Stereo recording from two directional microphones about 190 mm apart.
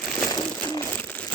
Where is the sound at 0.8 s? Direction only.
10° left (ahead or behind).